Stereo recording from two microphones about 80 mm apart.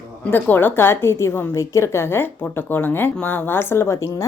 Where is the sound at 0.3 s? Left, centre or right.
Left.